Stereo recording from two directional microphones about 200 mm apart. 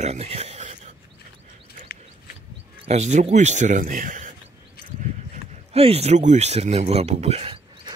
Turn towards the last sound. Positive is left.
turn(degrees=-30)  # may be behind; listen again after turning